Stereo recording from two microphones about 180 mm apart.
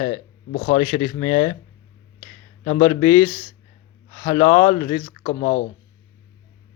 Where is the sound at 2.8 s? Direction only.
25° left (ahead or behind).